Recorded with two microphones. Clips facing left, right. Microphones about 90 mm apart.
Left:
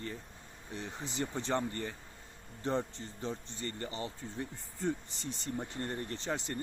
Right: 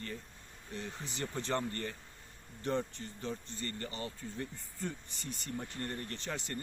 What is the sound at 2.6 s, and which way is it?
Speech, 25° left (ahead or behind).